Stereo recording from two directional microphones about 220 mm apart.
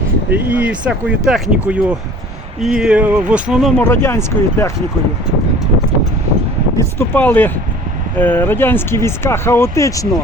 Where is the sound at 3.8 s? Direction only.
10° left (ahead or behind).